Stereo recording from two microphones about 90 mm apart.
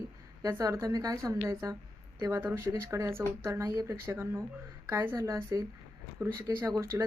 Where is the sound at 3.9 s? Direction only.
25° right (ahead or behind).